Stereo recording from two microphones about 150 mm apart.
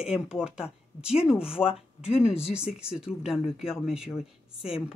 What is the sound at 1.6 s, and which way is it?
Speech, 40° left (ahead or behind).